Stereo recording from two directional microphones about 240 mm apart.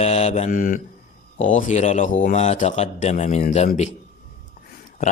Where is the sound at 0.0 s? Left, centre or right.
Left.